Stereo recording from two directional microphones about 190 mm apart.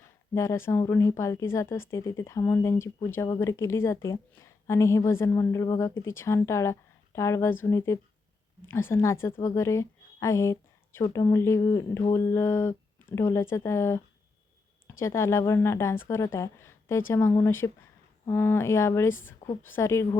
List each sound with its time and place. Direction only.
0.3 s a woman's voice: 15° left (ahead or behind)